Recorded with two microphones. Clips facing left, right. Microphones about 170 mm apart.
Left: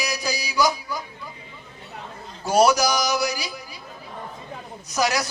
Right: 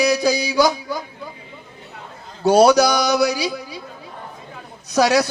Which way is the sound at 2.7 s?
65° right (ahead or behind).